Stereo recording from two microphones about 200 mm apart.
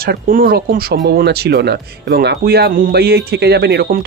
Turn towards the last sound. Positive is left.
turn(degrees=-55)  # may be behind; listen again after turning